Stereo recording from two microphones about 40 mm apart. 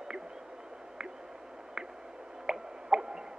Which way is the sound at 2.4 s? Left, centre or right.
Centre.